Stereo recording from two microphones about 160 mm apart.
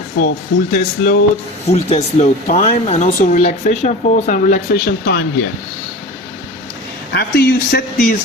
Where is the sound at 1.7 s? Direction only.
40° left (ahead or behind); by 5.2 s 80° left.